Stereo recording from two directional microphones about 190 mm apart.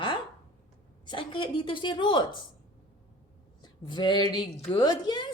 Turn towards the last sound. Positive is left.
turn(degrees=20)  # may be behind; listen again after turning